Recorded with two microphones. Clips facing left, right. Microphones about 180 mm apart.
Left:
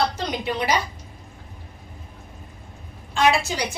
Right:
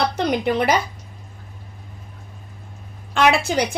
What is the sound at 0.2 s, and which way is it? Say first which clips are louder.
Speech: right 6 dB; 60° right (ahead or behind).